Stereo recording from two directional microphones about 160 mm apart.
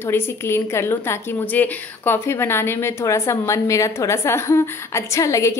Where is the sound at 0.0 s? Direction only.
15° left (ahead or behind).